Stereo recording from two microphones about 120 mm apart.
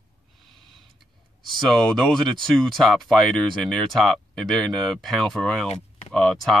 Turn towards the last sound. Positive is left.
turn(degrees=5)  # may be behind; listen again after turning